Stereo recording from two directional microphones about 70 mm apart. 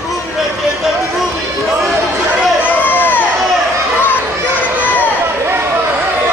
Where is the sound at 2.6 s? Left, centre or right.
Left.